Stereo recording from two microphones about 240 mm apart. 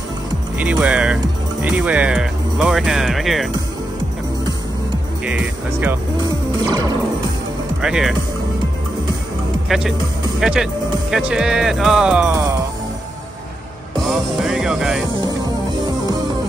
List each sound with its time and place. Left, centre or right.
0.6 s speech: centre
5.2 s speech: centre
6.7 s music: centre
7.8 s speech: centre
9.7 s speech: centre
14.4 s music: centre